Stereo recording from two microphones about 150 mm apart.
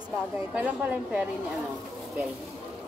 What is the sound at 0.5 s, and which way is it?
Speech, 10° right (ahead or behind).